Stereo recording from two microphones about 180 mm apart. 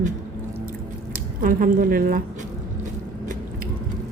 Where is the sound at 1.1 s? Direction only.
50° right (ahead or behind).